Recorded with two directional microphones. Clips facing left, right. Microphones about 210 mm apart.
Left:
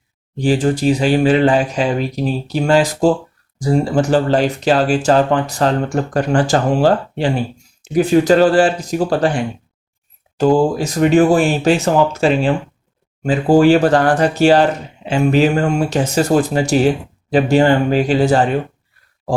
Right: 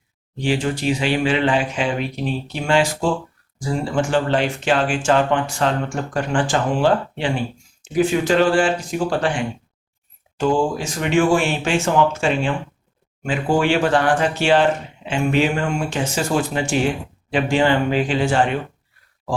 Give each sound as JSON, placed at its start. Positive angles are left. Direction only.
{"t": 0.4, "sound": "speech", "side_deg": 40}